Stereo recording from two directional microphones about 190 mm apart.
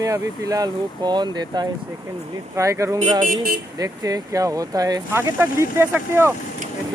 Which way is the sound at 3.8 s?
20° right (ahead or behind).